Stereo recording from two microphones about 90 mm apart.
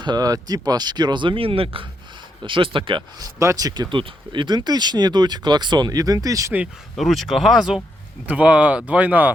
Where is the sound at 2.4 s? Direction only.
70° right (ahead or behind).